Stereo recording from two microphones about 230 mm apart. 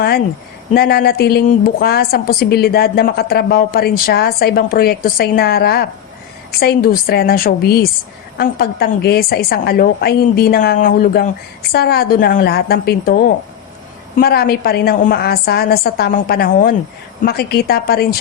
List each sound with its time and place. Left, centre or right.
0.7 s a woman's voice: left